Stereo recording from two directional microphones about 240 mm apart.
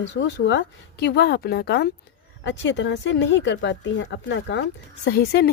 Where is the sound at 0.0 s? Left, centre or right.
Left.